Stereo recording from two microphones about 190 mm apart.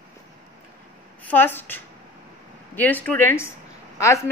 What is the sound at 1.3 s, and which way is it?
A woman's voice, 10° left (ahead or behind).